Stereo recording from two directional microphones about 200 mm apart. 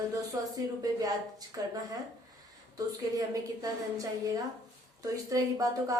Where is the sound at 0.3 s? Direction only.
20° right (ahead or behind).